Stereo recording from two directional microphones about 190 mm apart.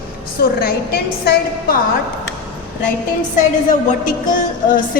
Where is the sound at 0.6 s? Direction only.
55° left (ahead or behind).